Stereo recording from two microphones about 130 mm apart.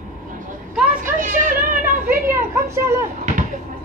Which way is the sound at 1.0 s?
90° right.